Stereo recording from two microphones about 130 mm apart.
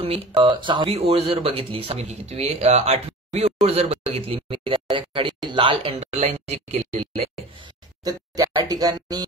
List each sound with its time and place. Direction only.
0.0 s speech: 40° right (ahead or behind)
0.8 s speech: 50° right (ahead or behind)
5.9 s speech: 60° right (ahead or behind)
8.0 s speech: 30° right (ahead or behind)